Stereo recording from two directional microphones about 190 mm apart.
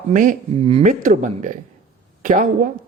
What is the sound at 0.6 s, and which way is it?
Speech, 30° right (ahead or behind).